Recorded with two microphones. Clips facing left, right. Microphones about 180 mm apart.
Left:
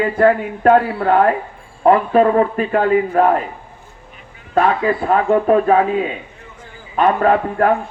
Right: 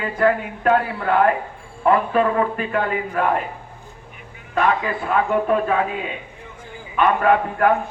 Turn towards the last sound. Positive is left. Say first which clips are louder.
# left 3 dB
turn(degrees=35)  # may be behind; listen again after turning